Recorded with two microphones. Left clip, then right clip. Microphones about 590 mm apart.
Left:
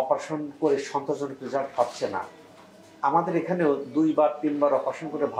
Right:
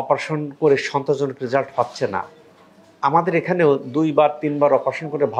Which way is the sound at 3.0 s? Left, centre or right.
Right.